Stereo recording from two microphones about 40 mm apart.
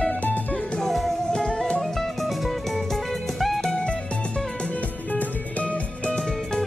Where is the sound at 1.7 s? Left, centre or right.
Centre.